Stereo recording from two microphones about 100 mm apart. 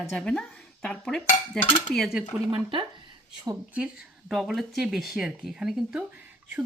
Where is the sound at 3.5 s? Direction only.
35° right (ahead or behind).